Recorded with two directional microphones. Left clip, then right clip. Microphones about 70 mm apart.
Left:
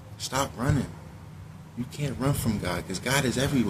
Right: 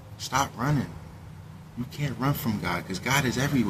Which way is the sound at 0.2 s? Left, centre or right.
Right.